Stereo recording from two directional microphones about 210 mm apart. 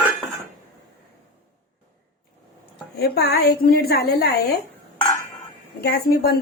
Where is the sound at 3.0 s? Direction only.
50° left (ahead or behind).